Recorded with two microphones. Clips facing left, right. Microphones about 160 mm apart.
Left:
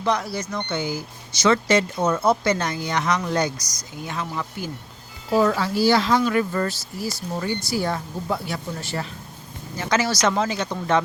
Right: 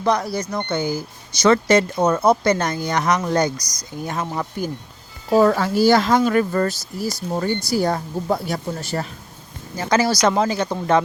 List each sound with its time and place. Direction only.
0.0 s speech: 45° right (ahead or behind)